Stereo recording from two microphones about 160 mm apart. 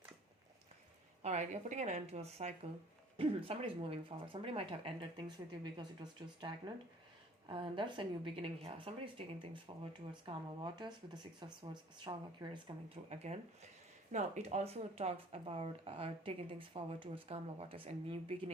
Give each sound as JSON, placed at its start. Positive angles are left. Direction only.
{"t": 1.2, "sound": "speech", "side_deg": -45}
{"t": 13.1, "sound": "speech", "side_deg": -40}